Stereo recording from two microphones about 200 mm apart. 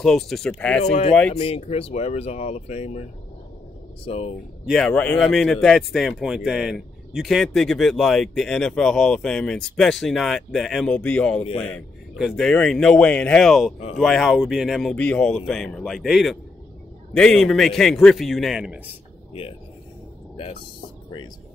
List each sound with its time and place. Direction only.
0.0 s speech: centre (ahead or behind)
0.8 s speech: 30° left (ahead or behind)
4.6 s speech: 5° left (ahead or behind)